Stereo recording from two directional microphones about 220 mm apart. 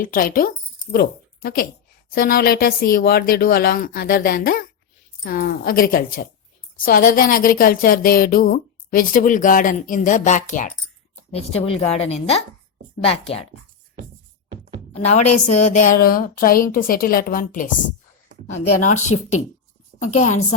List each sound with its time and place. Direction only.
0.0 s speech: 40° left (ahead or behind)
14.9 s a woman's voice: 30° left (ahead or behind)
15.2 s a woman's voice: 90° left
15.6 s speech: 35° left (ahead or behind)
18.8 s speech: 35° left (ahead or behind)